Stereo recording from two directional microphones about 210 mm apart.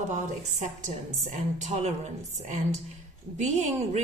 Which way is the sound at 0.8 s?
35° right (ahead or behind).